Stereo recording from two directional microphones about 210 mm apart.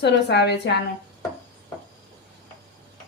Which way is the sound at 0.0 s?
55° left (ahead or behind).